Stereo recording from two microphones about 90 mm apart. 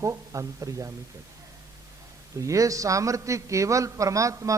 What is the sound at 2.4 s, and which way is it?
A man's voice, 35° right (ahead or behind).